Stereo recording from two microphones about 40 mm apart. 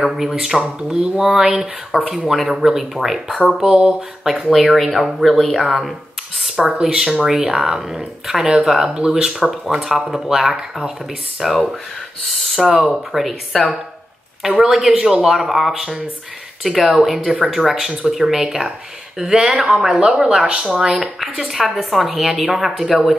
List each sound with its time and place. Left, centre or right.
0.0 s a woman's voice: centre
0.6 s speech: right
1.1 s a woman's voice: centre
3.4 s speech: right
4.5 s a woman's voice: centre
6.5 s speech: right
7.2 s a woman's voice: centre
13.5 s speech: centre
14.6 s a woman's voice: centre
19.9 s speech: right
20.2 s speech: centre
21.2 s a woman's voice: centre